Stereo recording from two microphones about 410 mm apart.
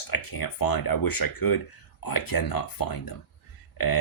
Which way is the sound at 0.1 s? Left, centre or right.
Left.